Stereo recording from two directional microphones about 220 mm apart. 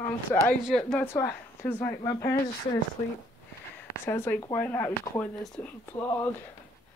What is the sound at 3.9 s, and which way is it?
Speech, 10° left (ahead or behind).